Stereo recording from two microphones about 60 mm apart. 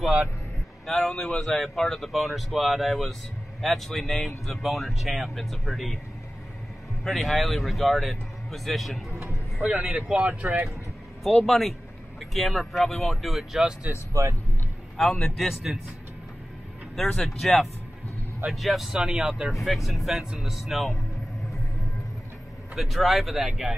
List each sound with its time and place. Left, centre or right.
0.0 s a man's voice: centre
0.8 s speech: centre
7.1 s speech: centre
9.6 s speech: centre
10.4 s speech: right
11.3 s speech: centre
14.2 s speech: right
15.0 s speech: centre
17.1 s speech: centre
22.8 s speech: centre